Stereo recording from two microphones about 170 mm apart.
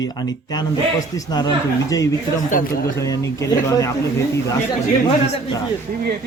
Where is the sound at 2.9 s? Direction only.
20° left (ahead or behind).